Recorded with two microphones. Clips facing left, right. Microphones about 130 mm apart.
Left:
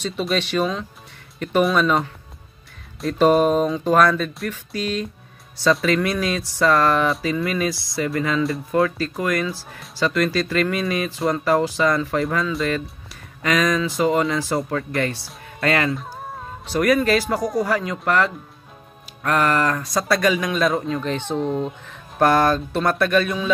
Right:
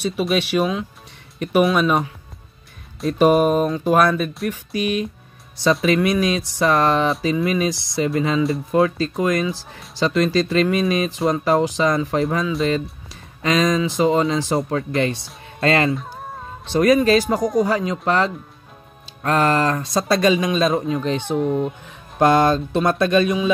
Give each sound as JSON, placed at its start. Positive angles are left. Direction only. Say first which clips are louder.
{"t": 0.0, "sound": "speech", "louder": "right 3 dB", "side_deg": -5}
{"t": 3.2, "sound": "speech", "louder": "right 1 dB", "side_deg": -10}
{"t": 16.0, "sound": "a sound", "louder": "even", "side_deg": 5}
{"t": 16.7, "sound": "speech", "louder": "right 3 dB", "side_deg": -25}
{"t": 21.8, "sound": "speech", "louder": "right 1 dB", "side_deg": -20}